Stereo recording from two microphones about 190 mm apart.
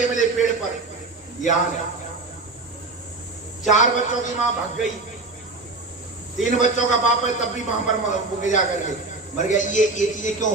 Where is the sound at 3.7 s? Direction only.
40° left (ahead or behind).